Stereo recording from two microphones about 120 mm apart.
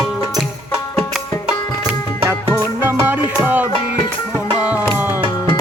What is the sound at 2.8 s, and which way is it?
Music, 15° right (ahead or behind).